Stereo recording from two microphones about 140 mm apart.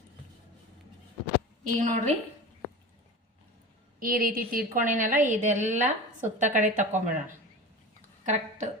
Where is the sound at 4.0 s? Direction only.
90° right; by 7.0 s 65° right (ahead or behind).